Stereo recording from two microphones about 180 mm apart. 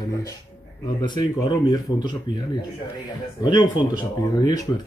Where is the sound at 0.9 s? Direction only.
25° left (ahead or behind).